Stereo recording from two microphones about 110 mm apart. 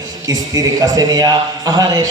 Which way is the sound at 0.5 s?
35° right (ahead or behind).